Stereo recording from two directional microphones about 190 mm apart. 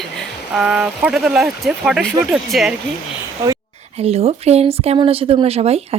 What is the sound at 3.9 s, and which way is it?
Speech, 30° right (ahead or behind).